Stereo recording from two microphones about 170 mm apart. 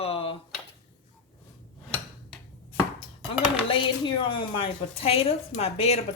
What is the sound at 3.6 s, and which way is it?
A woman's voice, 30° left (ahead or behind).